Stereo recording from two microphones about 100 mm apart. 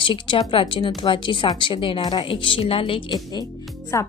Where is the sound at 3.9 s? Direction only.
30° left (ahead or behind).